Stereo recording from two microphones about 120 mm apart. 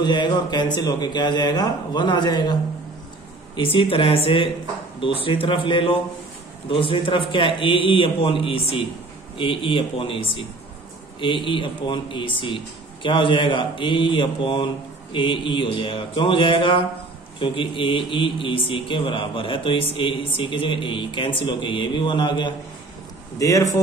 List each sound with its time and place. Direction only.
0.0 s a man's voice: 40° left (ahead or behind)
23.4 s speech: 25° left (ahead or behind)